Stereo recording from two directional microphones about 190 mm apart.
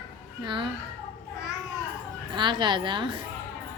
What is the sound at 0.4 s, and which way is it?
Speech, 25° right (ahead or behind).